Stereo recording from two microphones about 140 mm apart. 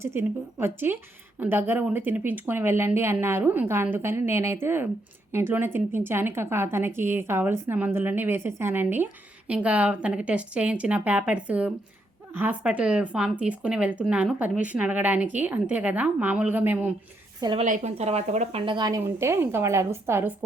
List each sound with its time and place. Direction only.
0.0 s speech: 15° right (ahead or behind)
17.6 s speech: 55° right (ahead or behind)
18.6 s a woman's voice: 35° right (ahead or behind); by 20.3 s 15° right (ahead or behind)